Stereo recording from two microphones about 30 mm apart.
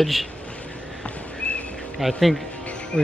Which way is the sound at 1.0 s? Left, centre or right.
Left.